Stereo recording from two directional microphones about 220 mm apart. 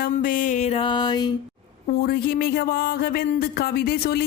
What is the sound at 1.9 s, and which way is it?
Speech, 45° left (ahead or behind).